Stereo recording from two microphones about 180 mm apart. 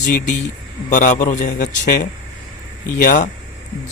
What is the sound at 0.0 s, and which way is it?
A man's voice, 45° left (ahead or behind).